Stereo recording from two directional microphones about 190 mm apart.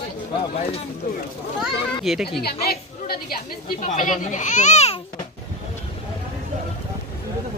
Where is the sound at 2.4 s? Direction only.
55° left (ahead or behind).